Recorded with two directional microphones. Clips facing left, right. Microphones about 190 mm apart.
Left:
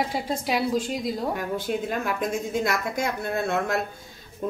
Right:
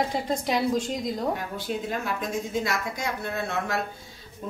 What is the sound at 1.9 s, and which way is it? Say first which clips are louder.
Speech: left 3 dB; 50° left (ahead or behind).